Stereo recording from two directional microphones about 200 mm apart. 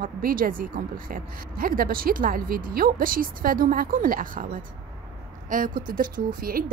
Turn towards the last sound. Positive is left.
turn(degrees=-45)  # may be behind; listen again after turning